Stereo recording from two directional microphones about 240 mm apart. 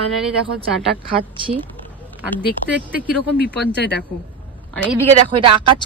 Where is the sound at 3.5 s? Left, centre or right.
Left.